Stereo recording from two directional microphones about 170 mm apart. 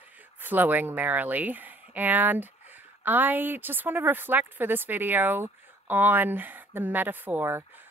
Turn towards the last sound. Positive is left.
turn(degrees=-15)  # may be behind; listen again after turning